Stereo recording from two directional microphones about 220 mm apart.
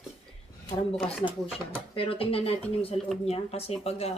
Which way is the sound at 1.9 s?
25° left (ahead or behind).